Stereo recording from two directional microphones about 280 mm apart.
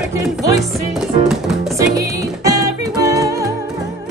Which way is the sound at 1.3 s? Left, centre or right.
Centre.